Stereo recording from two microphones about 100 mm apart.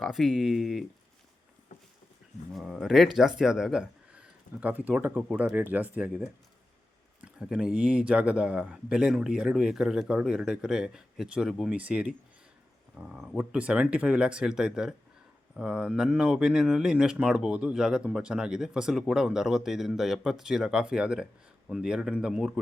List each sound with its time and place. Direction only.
0.0 s speech: centre (ahead or behind)
2.5 s speech: centre (ahead or behind)
7.3 s speech: 5° right (ahead or behind)